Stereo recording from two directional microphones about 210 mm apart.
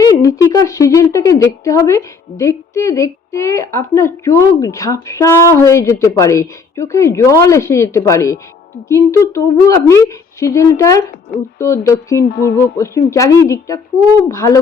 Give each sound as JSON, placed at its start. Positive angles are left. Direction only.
{"t": 0.0, "sound": "a woman's voice", "side_deg": 15}
{"t": 12.3, "sound": "speech", "side_deg": 50}
{"t": 12.7, "sound": "a woman's voice", "side_deg": 15}